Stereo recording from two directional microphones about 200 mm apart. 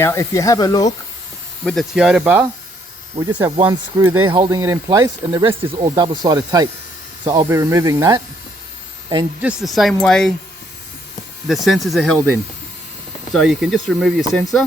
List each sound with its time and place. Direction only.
0.0 s speech: 15° left (ahead or behind)
1.6 s speech: centre (ahead or behind); by 8.2 s 15° right (ahead or behind)
9.4 s speech: 5° right (ahead or behind)
11.4 s speech: centre (ahead or behind)
13.3 s speech: centre (ahead or behind)